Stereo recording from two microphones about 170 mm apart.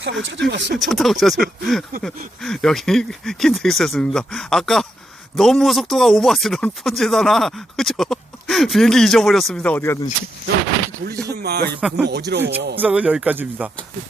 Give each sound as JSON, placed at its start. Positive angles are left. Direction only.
{"t": 0.0, "sound": "speech", "side_deg": -90}
{"t": 0.8, "sound": "speech", "side_deg": 0}
{"t": 11.3, "sound": "a man's voice", "side_deg": -70}
{"t": 11.8, "sound": "speech", "side_deg": -5}
{"t": 12.0, "sound": "speech", "side_deg": -80}
{"t": 12.7, "sound": "speech", "side_deg": -10}